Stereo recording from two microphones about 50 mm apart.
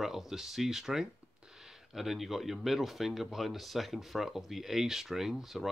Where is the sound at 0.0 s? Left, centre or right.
Centre.